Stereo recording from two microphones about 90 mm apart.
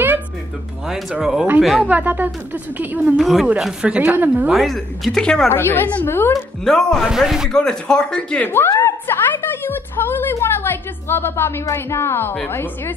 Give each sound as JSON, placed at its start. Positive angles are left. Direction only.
{"t": 1.1, "sound": "speech", "side_deg": -5}
{"t": 1.9, "sound": "speech", "side_deg": -20}
{"t": 3.2, "sound": "speech", "side_deg": 0}
{"t": 3.4, "sound": "a woman's voice", "side_deg": -10}
{"t": 4.5, "sound": "speech", "side_deg": 0}
{"t": 5.5, "sound": "a woman's voice", "side_deg": 25}
{"t": 6.6, "sound": "speech", "side_deg": 5}
{"t": 7.1, "sound": "speech", "side_deg": -5}
{"t": 7.5, "sound": "speech", "side_deg": 5}
{"t": 8.5, "sound": "a woman's voice", "side_deg": 25}